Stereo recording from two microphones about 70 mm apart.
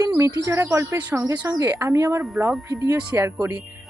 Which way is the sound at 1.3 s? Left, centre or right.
Right.